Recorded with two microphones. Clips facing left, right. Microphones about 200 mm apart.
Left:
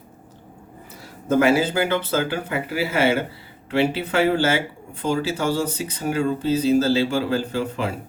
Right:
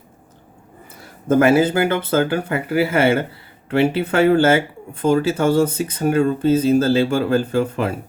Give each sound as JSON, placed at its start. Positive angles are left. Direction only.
{"t": 1.3, "sound": "speech", "side_deg": -55}